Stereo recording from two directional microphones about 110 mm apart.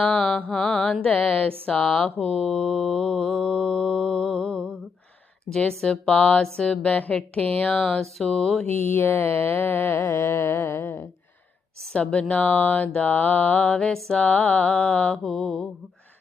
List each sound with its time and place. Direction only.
0.0 s mantra: 5° left (ahead or behind)
8.7 s a sound: 20° left (ahead or behind)
12.3 s mantra: 15° left (ahead or behind)